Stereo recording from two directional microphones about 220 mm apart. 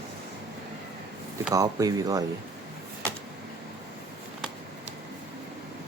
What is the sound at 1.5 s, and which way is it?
Speech, 15° right (ahead or behind).